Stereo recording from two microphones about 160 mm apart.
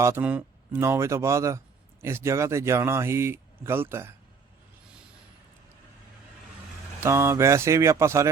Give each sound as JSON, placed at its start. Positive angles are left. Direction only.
{"t": 0.0, "sound": "speech", "side_deg": -15}
{"t": 7.0, "sound": "speech", "side_deg": -15}